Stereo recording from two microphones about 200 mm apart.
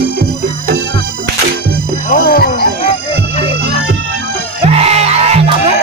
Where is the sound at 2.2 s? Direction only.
50° left (ahead or behind).